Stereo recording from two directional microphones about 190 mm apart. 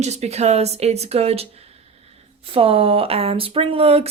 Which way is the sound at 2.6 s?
30° right (ahead or behind).